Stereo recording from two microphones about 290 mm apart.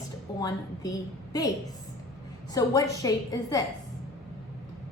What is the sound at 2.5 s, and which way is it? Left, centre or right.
A woman's voice, centre.